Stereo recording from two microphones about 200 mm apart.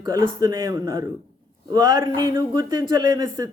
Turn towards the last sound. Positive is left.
turn(degrees=-20)  # may be behind; listen again after turning